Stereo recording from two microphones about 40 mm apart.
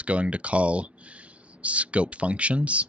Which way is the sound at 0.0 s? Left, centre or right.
Right.